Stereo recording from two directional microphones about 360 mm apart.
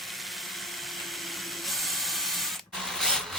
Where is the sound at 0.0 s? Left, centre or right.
Centre.